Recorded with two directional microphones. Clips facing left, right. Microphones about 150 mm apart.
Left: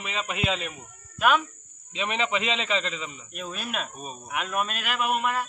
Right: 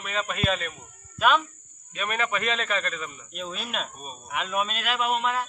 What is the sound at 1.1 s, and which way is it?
Speech, 5° left (ahead or behind).